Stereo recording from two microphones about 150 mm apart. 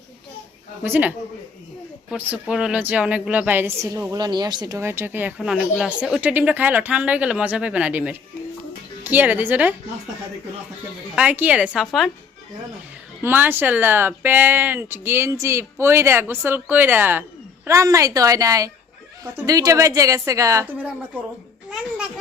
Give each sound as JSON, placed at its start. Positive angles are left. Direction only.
{"t": 0.8, "sound": "a woman's voice", "side_deg": -10}
{"t": 11.1, "sound": "a woman's voice", "side_deg": -10}
{"t": 13.2, "sound": "a woman's voice", "side_deg": -15}